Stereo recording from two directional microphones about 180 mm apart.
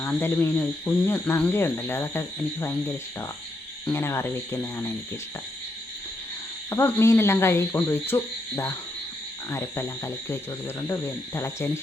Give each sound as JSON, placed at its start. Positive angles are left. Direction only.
{"t": 0.0, "sound": "speech", "side_deg": 10}
{"t": 6.7, "sound": "speech", "side_deg": 15}